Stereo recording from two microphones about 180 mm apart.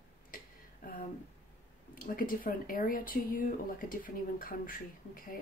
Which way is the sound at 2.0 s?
50° left (ahead or behind).